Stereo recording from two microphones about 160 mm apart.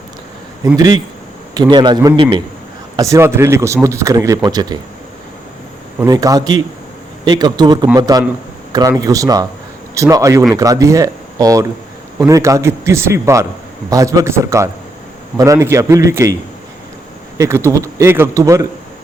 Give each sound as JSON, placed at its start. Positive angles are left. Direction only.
{"t": 0.8, "sound": "speech", "side_deg": -25}
{"t": 2.9, "sound": "speech", "side_deg": -20}
{"t": 6.1, "sound": "a man's voice", "side_deg": -20}
{"t": 17.3, "sound": "speech", "side_deg": -20}